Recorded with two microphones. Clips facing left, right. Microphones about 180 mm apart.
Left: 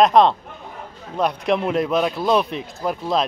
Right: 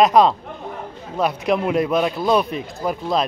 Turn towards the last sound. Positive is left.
turn(degrees=0)  # may be behind; listen again after turning